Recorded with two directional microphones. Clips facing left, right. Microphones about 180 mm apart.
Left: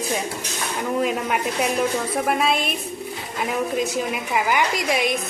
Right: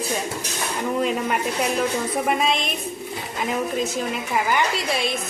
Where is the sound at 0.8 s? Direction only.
Centre (ahead or behind).